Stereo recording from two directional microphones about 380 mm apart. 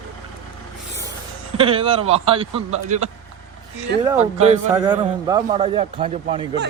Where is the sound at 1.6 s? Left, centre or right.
Centre.